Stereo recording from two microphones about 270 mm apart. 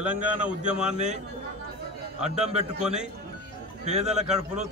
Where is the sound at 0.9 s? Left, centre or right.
Right.